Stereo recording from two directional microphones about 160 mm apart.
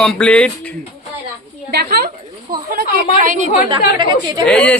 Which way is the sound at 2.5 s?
65° right (ahead or behind).